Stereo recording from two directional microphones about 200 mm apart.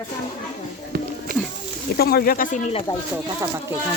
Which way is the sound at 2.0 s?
50° left (ahead or behind).